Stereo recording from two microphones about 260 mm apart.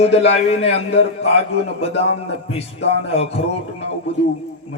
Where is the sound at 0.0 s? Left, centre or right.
Left.